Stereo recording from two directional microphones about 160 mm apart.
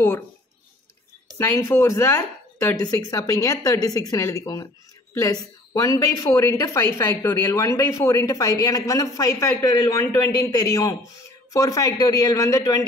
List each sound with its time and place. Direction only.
1.4 s a woman's voice: 15° left (ahead or behind)